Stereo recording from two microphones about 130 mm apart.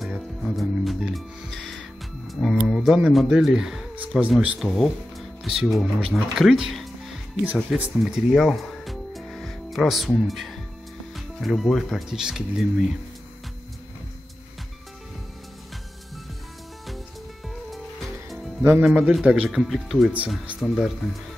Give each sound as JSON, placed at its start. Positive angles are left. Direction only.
{"t": 0.4, "sound": "music", "side_deg": 0}
{"t": 2.7, "sound": "speech", "side_deg": 0}
{"t": 4.6, "sound": "speech", "side_deg": 0}
{"t": 18.6, "sound": "speech", "side_deg": -15}
{"t": 18.9, "sound": "speech", "side_deg": -5}